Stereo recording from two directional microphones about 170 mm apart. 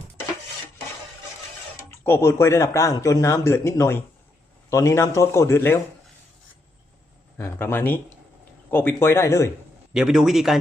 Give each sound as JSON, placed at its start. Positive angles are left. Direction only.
{"t": 2.0, "sound": "speech", "side_deg": 15}
{"t": 7.3, "sound": "speech", "side_deg": 15}
{"t": 9.9, "sound": "a man's voice", "side_deg": -5}